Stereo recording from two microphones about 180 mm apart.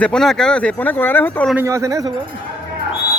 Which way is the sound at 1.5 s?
15° right (ahead or behind).